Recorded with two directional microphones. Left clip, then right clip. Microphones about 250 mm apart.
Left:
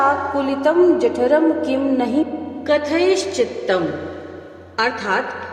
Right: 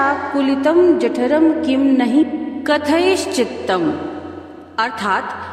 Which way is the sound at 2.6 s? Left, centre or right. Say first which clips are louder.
Right 1 dB; right.